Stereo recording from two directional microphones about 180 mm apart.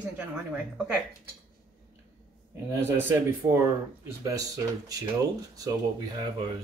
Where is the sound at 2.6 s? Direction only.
10° right (ahead or behind).